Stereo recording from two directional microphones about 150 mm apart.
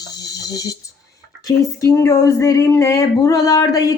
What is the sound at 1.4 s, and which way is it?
Child singing, 25° left (ahead or behind).